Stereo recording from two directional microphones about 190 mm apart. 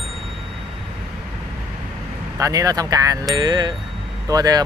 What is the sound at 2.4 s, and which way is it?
Speech, 20° right (ahead or behind).